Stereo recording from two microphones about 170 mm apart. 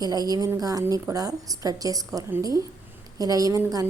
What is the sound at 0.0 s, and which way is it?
A woman's voice, 20° right (ahead or behind).